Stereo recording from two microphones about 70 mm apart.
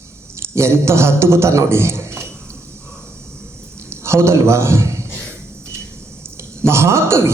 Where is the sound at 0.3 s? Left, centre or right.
Right.